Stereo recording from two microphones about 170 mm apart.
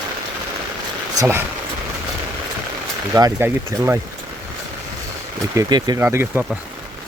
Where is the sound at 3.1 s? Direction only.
20° right (ahead or behind).